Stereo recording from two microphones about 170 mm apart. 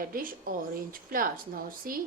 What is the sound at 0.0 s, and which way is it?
A woman's voice, 55° right (ahead or behind).